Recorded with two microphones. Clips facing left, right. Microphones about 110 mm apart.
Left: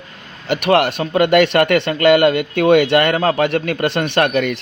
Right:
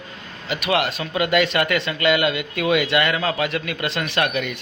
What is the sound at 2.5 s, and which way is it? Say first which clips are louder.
Speech: left 8 dB; 60° left (ahead or behind).